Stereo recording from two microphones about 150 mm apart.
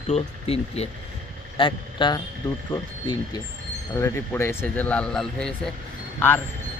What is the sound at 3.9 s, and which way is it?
Speech, 20° left (ahead or behind).